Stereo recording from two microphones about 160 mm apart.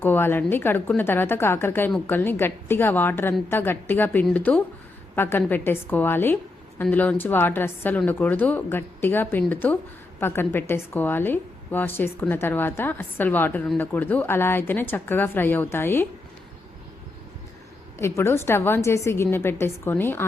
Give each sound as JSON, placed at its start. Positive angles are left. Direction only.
{"t": 0.0, "sound": "a woman's voice", "side_deg": 15}
{"t": 18.2, "sound": "a woman's voice", "side_deg": 15}